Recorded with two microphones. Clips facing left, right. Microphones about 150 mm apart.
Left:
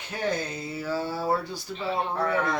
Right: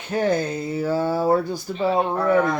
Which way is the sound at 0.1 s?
50° right (ahead or behind).